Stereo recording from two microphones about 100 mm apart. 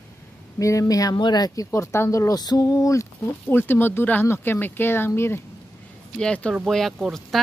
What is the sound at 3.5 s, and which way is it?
Speech, 20° left (ahead or behind).